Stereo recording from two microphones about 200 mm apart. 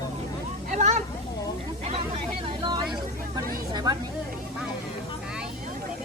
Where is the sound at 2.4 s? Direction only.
25° right (ahead or behind).